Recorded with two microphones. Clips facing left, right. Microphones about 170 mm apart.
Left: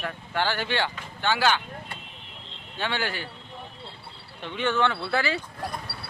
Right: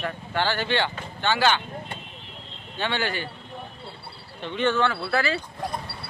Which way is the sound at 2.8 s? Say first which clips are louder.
Right 2 dB; 10° left (ahead or behind).